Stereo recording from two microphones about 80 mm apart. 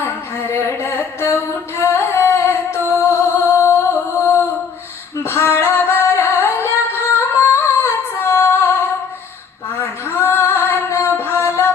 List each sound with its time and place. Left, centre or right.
0.0 s a sound: left
3.6 s music: left
5.2 s singing: left
9.8 s music: left